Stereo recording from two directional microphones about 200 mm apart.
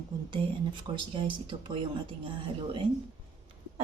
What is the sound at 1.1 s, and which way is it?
Speech, 25° right (ahead or behind).